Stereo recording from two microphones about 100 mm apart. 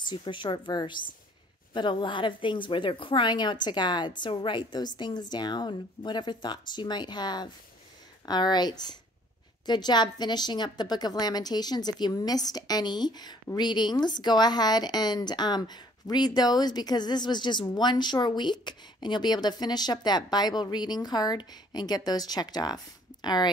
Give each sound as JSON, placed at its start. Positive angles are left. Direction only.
{"t": 0.1, "sound": "speech", "side_deg": 50}